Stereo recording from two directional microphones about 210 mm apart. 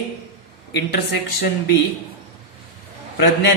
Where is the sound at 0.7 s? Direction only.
50° left (ahead or behind).